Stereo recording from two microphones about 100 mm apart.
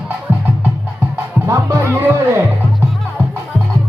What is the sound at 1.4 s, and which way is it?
Music, 30° right (ahead or behind).